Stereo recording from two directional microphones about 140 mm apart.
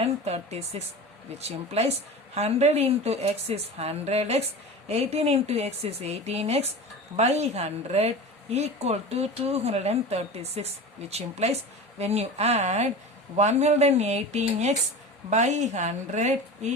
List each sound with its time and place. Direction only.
0.0 s a woman's voice: 45° right (ahead or behind)